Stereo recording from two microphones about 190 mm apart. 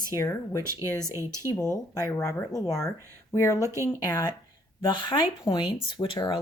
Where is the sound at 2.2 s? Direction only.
15° left (ahead or behind).